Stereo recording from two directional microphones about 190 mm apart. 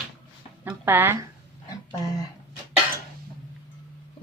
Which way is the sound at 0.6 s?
10° right (ahead or behind).